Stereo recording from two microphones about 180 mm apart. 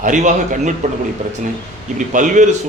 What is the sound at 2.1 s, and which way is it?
Speech, 45° right (ahead or behind).